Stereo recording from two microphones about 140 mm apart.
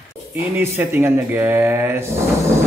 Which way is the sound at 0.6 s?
15° right (ahead or behind).